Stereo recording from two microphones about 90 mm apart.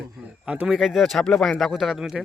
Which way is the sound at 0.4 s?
15° right (ahead or behind).